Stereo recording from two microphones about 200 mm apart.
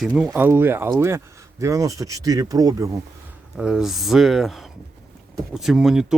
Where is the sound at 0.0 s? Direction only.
Centre (ahead or behind); by 2.9 s 15° right (ahead or behind).